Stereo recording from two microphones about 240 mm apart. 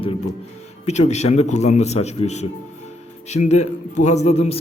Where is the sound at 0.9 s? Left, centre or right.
Left.